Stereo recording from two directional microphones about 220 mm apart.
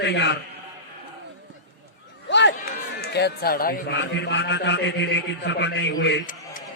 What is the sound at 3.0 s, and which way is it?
A man's voice, 45° left (ahead or behind).